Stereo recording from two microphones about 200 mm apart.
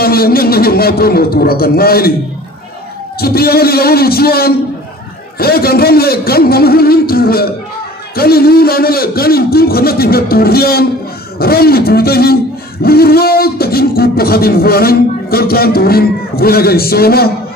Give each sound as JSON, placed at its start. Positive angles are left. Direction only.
{"t": 0.0, "sound": "beatboxing", "side_deg": 50}
{"t": 3.2, "sound": "beatboxing", "side_deg": 50}